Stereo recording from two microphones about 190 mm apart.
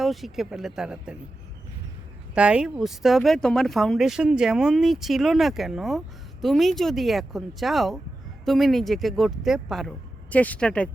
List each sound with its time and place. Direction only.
0.0 s speech: centre (ahead or behind)
2.3 s speech: 5° right (ahead or behind)